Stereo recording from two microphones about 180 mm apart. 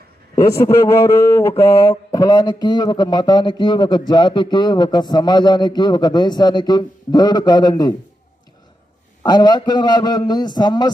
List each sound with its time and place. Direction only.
0.3 s a man's voice: 20° left (ahead or behind)
9.2 s a man's voice: 20° left (ahead or behind)